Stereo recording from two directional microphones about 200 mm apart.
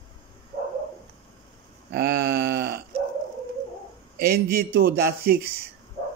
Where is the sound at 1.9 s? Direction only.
50° right (ahead or behind).